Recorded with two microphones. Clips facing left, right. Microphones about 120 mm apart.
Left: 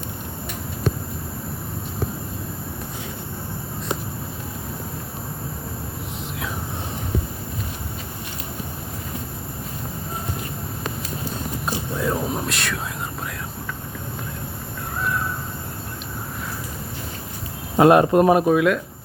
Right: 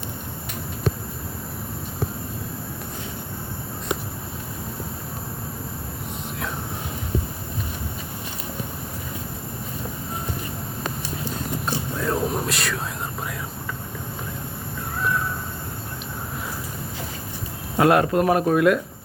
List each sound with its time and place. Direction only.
11.6 s whispering: centre (ahead or behind)
17.7 s speech: 25° left (ahead or behind)
18.4 s speech: centre (ahead or behind)